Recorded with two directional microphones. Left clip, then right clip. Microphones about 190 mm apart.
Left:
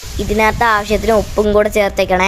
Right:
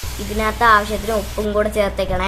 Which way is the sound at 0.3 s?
40° left (ahead or behind).